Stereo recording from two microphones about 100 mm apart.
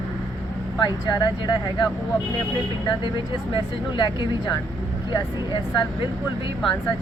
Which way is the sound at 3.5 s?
50° left (ahead or behind).